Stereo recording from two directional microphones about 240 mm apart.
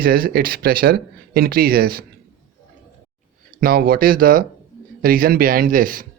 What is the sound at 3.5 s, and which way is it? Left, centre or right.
Speech, right.